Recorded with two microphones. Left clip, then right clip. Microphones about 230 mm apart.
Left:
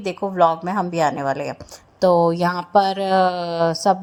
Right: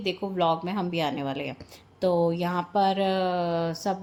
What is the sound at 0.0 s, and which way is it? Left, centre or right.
A woman's voice, left.